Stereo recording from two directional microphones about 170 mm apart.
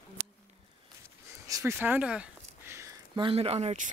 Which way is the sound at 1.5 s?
15° right (ahead or behind).